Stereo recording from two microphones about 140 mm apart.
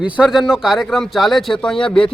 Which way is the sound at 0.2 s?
5° right (ahead or behind).